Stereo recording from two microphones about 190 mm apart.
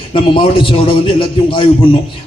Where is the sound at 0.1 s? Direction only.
25° left (ahead or behind).